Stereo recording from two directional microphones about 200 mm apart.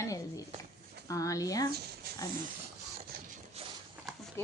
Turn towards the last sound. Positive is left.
turn(degrees=-30)  # may be behind; listen again after turning